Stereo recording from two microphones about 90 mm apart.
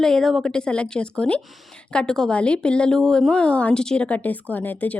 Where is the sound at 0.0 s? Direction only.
5° left (ahead or behind).